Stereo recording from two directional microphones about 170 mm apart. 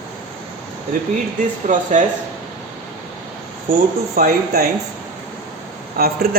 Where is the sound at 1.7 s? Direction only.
50° right (ahead or behind).